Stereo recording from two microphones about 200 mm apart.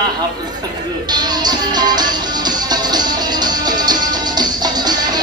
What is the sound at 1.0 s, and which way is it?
Music, 20° right (ahead or behind).